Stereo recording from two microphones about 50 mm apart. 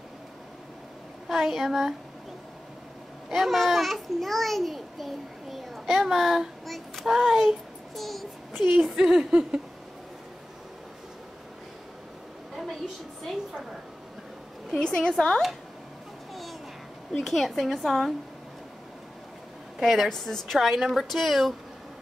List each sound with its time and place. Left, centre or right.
1.3 s a woman's voice: centre
3.3 s a child's voice: centre
8.9 s a woman's voice: centre
12.5 s a sound: centre
14.8 s a woman's voice: centre
17.2 s a woman's voice: centre
19.8 s a woman's voice: centre
20.1 s a woman's voice: centre
20.5 s a woman's voice: centre